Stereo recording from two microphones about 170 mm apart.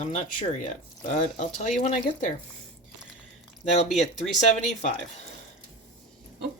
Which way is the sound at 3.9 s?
Centre (ahead or behind).